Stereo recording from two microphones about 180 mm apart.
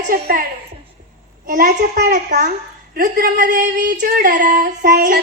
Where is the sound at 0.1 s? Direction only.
55° right (ahead or behind).